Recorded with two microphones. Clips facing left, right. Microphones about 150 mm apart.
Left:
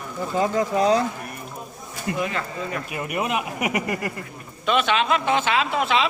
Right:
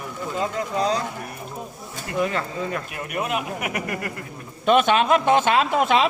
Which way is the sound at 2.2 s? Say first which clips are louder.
Right 6 dB; 40° right (ahead or behind).